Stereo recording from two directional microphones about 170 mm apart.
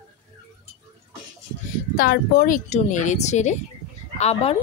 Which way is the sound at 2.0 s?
60° left (ahead or behind).